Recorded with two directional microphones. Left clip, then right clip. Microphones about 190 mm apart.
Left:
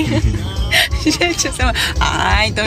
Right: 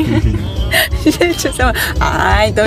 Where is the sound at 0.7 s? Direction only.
25° right (ahead or behind).